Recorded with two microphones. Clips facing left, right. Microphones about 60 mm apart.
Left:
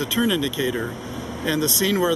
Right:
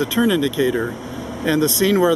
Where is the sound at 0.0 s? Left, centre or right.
Right.